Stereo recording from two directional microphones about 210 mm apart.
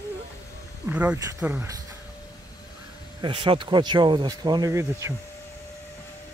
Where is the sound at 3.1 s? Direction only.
20° right (ahead or behind).